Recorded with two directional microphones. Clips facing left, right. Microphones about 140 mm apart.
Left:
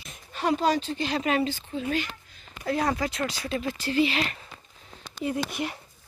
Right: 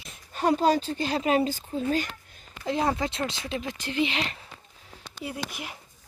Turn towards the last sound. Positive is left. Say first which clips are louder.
# left 6 dB
turn(degrees=-10)  # may be behind; listen again after turning